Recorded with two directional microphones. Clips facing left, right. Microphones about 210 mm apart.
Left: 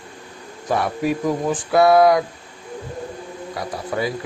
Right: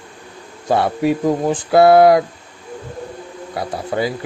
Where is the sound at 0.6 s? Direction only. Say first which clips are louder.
Right 4 dB; 30° right (ahead or behind).